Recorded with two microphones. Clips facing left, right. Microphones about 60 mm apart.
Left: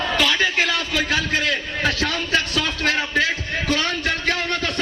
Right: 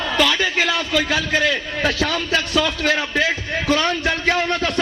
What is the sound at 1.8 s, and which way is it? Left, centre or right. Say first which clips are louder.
Speech: right 3 dB; right.